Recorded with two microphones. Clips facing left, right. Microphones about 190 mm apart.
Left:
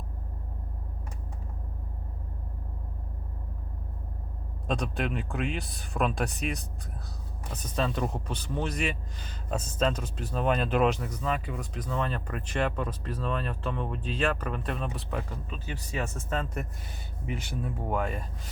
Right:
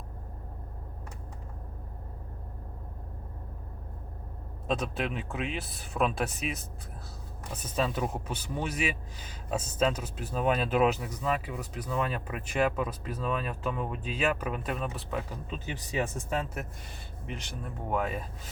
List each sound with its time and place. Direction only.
4.6 s speech: centre (ahead or behind)
15.4 s speech: 20° right (ahead or behind)
17.2 s speech: 5° left (ahead or behind)